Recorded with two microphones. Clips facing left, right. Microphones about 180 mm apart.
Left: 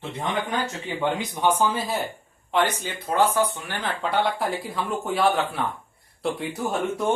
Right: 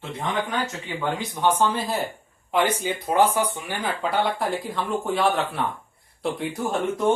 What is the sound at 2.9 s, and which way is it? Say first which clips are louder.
Speech: right 2 dB; 15° right (ahead or behind).